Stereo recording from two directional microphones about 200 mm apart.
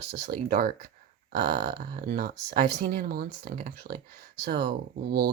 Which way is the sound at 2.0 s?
50° right (ahead or behind).